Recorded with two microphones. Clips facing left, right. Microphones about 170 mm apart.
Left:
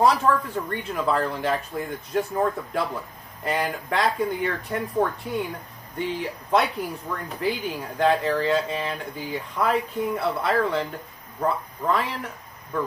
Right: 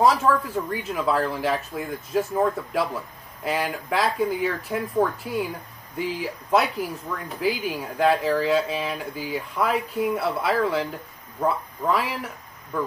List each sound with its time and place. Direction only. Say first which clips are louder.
0.0 s speech: right 1 dB; centre (ahead or behind)